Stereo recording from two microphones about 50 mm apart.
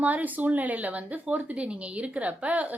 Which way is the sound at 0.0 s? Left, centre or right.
Right.